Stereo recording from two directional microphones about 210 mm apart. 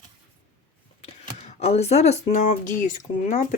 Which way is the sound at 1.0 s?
30° left (ahead or behind).